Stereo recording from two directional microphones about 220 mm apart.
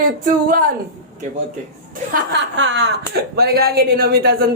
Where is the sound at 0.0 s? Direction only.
40° right (ahead or behind).